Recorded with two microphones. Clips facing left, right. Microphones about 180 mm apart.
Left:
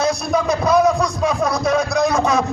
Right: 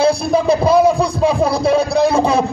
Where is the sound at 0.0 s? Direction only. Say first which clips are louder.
Right 5 dB; 30° right (ahead or behind).